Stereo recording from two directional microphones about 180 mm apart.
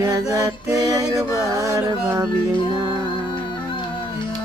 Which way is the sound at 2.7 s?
25° right (ahead or behind).